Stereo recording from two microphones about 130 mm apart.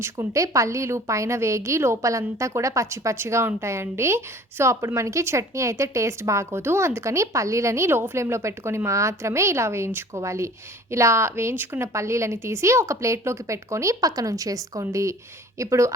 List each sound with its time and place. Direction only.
0.0 s a woman's voice: 20° right (ahead or behind)